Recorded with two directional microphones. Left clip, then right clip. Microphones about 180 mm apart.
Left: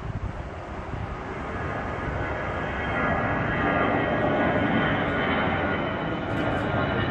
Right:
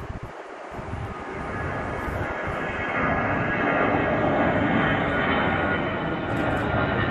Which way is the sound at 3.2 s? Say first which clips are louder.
Right 1 dB; 10° left (ahead or behind).